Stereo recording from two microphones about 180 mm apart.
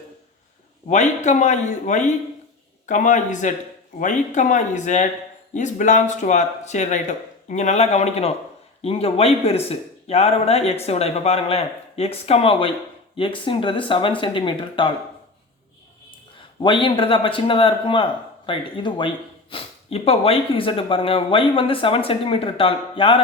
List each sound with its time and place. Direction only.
0.9 s a man's voice: 40° left (ahead or behind)
16.6 s a man's voice: 25° left (ahead or behind)